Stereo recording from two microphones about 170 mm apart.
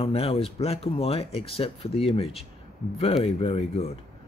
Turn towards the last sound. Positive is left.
turn(degrees=35)  # may be behind; listen again after turning